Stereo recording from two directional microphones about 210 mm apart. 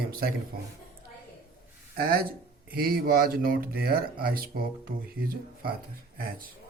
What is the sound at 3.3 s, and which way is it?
Speech, 45° right (ahead or behind).